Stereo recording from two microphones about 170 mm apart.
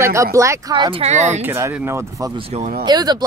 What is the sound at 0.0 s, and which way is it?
Speech, 15° right (ahead or behind).